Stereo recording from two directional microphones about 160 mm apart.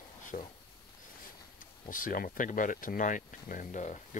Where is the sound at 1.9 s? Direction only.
60° left (ahead or behind).